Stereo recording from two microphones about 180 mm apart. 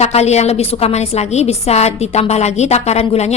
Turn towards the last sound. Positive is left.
turn(degrees=35)  # may be behind; listen again after turning